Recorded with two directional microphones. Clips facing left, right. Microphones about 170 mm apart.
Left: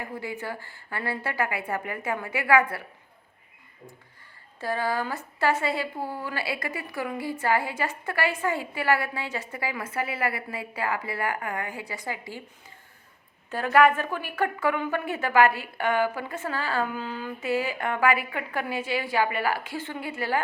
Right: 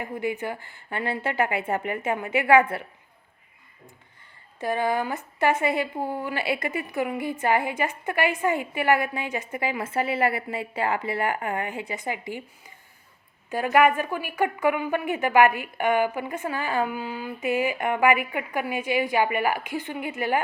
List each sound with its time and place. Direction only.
0.0 s a woman's voice: 20° right (ahead or behind)
4.6 s a woman's voice: 20° right (ahead or behind)
13.5 s a woman's voice: 15° right (ahead or behind)